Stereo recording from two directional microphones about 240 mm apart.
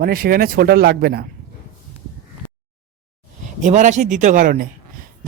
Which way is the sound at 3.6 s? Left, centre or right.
Right.